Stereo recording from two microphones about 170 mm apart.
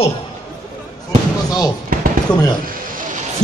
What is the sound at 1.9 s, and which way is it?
Fireworks, 55° right (ahead or behind).